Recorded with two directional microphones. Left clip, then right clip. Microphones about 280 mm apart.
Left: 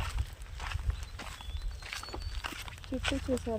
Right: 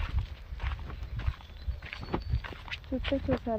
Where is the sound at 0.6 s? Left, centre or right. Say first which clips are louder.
Left 2 dB; centre.